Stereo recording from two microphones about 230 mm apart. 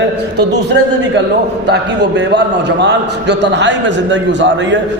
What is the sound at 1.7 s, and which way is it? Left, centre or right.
A man's voice, right.